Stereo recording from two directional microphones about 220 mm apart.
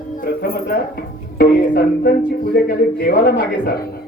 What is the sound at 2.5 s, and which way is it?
A man's voice, 45° left (ahead or behind).